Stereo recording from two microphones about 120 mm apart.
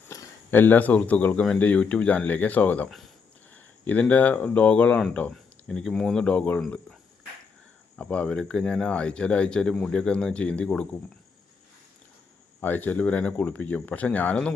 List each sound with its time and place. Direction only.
0.1 s a sound: 25° left (ahead or behind)
0.5 s speech: 15° left (ahead or behind)
7.9 s speech: 10° left (ahead or behind)
12.5 s speech: 15° left (ahead or behind)